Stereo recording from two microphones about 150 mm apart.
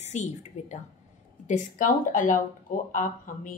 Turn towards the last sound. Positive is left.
turn(degrees=60)  # may be behind; listen again after turning